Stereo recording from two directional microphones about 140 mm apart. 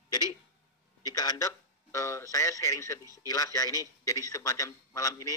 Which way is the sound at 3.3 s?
25° left (ahead or behind).